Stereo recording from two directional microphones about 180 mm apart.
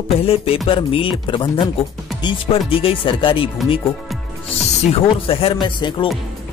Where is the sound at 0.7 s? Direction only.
30° left (ahead or behind).